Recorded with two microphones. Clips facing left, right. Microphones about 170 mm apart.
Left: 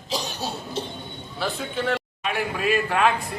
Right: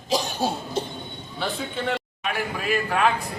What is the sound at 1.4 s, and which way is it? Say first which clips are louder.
A man's voice: left 1 dB; 5° left (ahead or behind).